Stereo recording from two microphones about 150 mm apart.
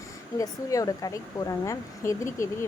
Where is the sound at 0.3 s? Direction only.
20° left (ahead or behind).